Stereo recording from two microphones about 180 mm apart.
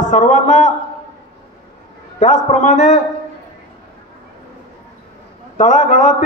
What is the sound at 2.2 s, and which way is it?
Speech, 45° left (ahead or behind).